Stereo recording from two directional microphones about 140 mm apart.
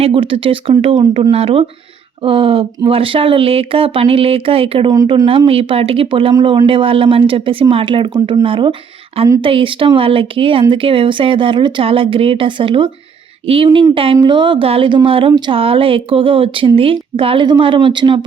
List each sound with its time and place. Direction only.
0.0 s a woman's voice: 40° right (ahead or behind)
4.9 s speech: 30° right (ahead or behind)
5.5 s a woman's voice: 40° right (ahead or behind)
13.9 s a woman's voice: 40° right (ahead or behind)